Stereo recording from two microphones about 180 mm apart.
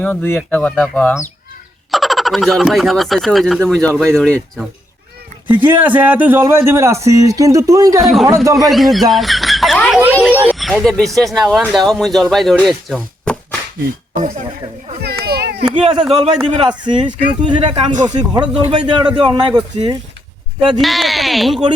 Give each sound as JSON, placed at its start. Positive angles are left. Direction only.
{"t": 0.0, "sound": "speech", "side_deg": 10}
{"t": 1.9, "sound": "speech", "side_deg": 0}
{"t": 5.5, "sound": "speech", "side_deg": -10}
{"t": 8.0, "sound": "speech", "side_deg": 0}
{"t": 14.2, "sound": "speech", "side_deg": -40}
{"t": 15.0, "sound": "cat", "side_deg": -60}
{"t": 15.7, "sound": "speech", "side_deg": -35}
{"t": 16.5, "sound": "speech", "side_deg": -25}
{"t": 20.7, "sound": "speech", "side_deg": 0}